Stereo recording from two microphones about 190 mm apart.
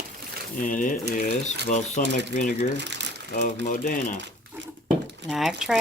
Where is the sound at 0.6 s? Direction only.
45° left (ahead or behind).